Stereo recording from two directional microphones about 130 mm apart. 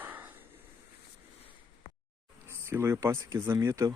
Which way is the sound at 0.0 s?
15° right (ahead or behind).